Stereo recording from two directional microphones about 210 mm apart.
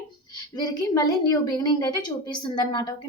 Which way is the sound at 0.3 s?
20° left (ahead or behind).